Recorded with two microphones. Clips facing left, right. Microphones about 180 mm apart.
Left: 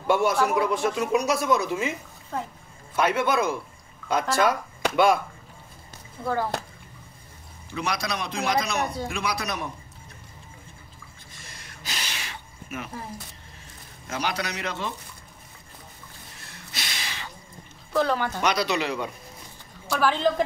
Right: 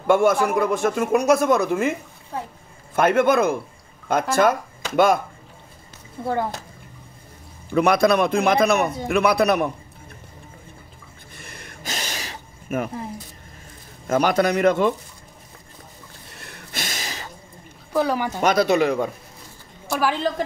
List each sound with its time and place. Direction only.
0.0 s speech: 50° right (ahead or behind)
3.0 s speech: 50° right (ahead or behind)
7.7 s a man's voice: 55° right (ahead or behind)
11.3 s gasp: 55° right (ahead or behind)
14.0 s speech: 50° right (ahead or behind)
16.3 s a sound: 60° right (ahead or behind); by 17.3 s 40° right (ahead or behind)
17.9 s speech: 10° right (ahead or behind)
18.4 s speech: 50° right (ahead or behind)
20.0 s speech: 10° right (ahead or behind)